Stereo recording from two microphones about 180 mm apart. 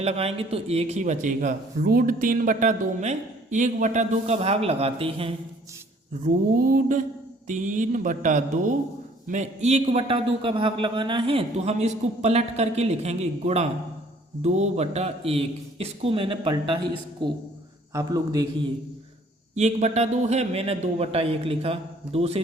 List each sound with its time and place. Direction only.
0.0 s a man's voice: 35° right (ahead or behind)
6.2 s a man's voice: 50° right (ahead or behind); by 18.4 s 20° right (ahead or behind)
19.5 s a man's voice: 40° right (ahead or behind)